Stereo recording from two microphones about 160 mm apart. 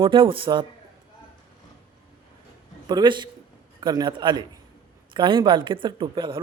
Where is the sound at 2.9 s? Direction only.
25° right (ahead or behind).